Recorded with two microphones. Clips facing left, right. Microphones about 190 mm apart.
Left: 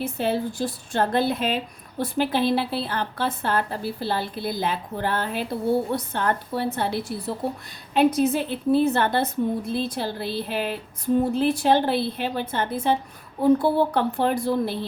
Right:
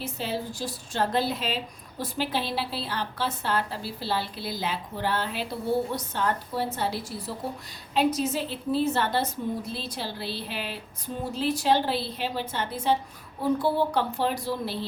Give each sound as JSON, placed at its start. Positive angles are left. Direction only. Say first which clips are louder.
{"t": 0.0, "sound": "a woman's voice", "louder": "left 7 dB", "side_deg": 55}